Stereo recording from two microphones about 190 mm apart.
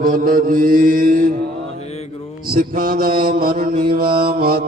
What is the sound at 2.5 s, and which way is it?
A man's voice, 45° right (ahead or behind).